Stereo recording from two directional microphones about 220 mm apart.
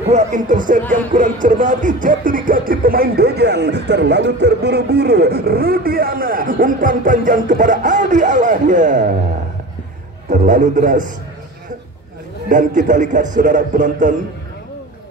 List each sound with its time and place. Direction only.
0.1 s music: 35° right (ahead or behind)
10.3 s music: 35° right (ahead or behind)
12.4 s music: 35° right (ahead or behind)